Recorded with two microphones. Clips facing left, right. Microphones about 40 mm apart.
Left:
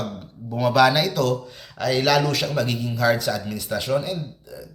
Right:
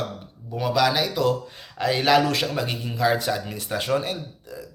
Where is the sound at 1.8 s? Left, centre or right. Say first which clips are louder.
Even; right.